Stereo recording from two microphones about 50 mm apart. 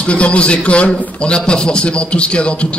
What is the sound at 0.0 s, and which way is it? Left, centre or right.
A man's voice, left.